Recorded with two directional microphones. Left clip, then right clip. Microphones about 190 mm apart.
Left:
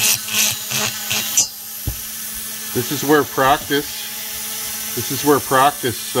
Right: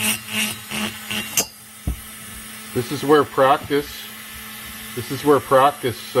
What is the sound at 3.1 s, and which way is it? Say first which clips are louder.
Speech: even; 30° left (ahead or behind).